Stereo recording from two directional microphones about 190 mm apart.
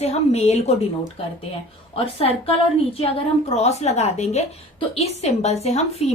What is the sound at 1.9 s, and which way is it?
A woman's voice, 30° left (ahead or behind).